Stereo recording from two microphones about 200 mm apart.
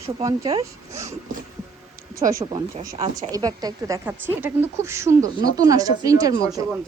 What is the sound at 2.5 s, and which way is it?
Speech, 25° right (ahead or behind).